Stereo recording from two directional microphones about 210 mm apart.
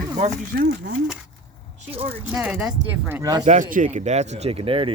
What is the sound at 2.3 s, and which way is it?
Speech, 5° right (ahead or behind).